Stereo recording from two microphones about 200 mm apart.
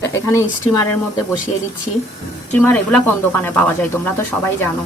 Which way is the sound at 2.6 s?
10° left (ahead or behind).